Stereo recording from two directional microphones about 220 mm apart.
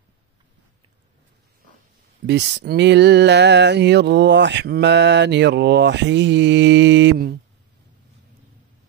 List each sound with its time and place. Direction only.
2.2 s speech: 50° right (ahead or behind)